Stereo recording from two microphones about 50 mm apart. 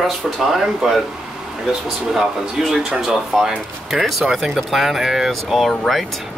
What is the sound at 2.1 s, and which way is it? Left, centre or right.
Speech, centre.